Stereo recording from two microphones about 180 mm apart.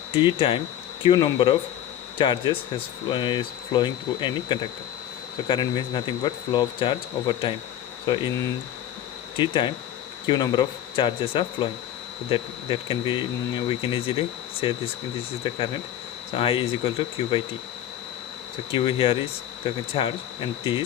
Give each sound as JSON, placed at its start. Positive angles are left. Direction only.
{"t": 0.1, "sound": "speech", "side_deg": 30}
{"t": 9.4, "sound": "speech", "side_deg": 25}
{"t": 18.7, "sound": "speech", "side_deg": 30}